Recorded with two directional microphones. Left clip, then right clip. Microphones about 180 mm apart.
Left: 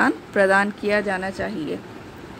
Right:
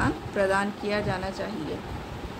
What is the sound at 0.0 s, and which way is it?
Speech, 45° left (ahead or behind).